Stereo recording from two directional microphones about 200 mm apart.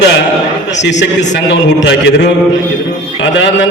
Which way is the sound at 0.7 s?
60° left (ahead or behind).